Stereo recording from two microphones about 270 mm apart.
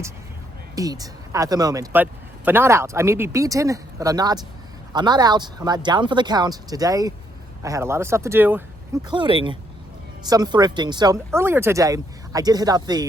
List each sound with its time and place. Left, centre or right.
0.8 s speech: centre
9.0 s speech: centre